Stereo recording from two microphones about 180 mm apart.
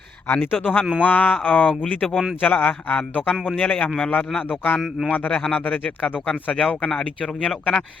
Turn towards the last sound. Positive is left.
turn(degrees=5)  # may be behind; listen again after turning